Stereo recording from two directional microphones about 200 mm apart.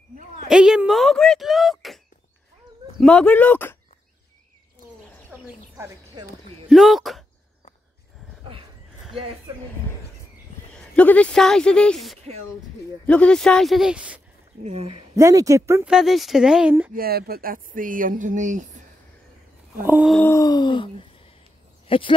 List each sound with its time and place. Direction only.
0.5 s speech: 5° right (ahead or behind)
3.0 s speech: 5° left (ahead or behind)
5.3 s a sound: 15° right (ahead or behind)
6.7 s speech: centre (ahead or behind)
10.7 s speech: 5° left (ahead or behind)
14.6 s speech: 30° right (ahead or behind)
15.1 s speech: 15° right (ahead or behind)
15.9 s speech: centre (ahead or behind)
16.9 s speech: 50° right (ahead or behind)
19.8 s speech: 5° right (ahead or behind)
20.2 s a sound: 15° left (ahead or behind)
21.8 s speech: 25° left (ahead or behind)